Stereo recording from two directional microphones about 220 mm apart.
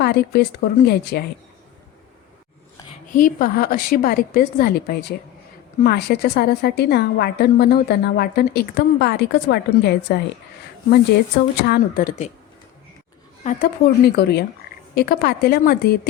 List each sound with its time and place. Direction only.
0.0 s a woman's voice: 50° left (ahead or behind)
3.1 s a woman's voice: 35° left (ahead or behind)
11.5 s a woman's voice: 50° left (ahead or behind)
13.4 s a woman's voice: 40° left (ahead or behind)